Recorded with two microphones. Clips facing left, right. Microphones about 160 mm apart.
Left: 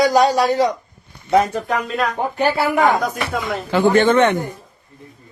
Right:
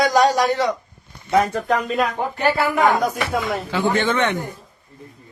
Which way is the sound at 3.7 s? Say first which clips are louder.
Left 8 dB; 50° left (ahead or behind).